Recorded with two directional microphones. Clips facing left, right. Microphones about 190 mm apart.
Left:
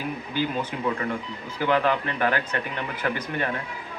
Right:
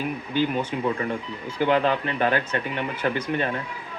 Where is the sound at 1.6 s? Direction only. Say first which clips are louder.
Right 1 dB; 20° right (ahead or behind).